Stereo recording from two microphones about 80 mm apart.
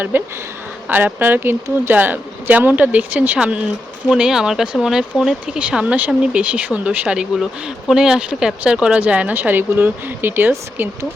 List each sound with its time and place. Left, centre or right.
0.1 s speech: right